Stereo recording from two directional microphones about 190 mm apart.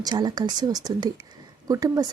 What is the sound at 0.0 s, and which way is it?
A woman's voice, 20° right (ahead or behind).